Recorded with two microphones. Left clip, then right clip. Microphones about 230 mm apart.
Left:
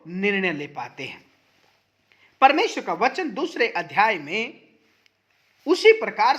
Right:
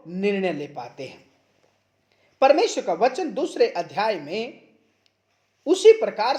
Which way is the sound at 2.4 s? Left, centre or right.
Left.